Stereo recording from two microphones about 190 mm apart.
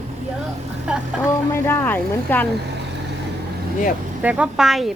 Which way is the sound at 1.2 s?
15° left (ahead or behind).